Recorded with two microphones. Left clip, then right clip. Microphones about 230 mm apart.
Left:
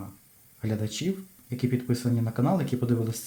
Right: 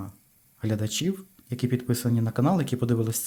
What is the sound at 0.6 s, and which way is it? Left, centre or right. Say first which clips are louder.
Speech: right 3 dB; right.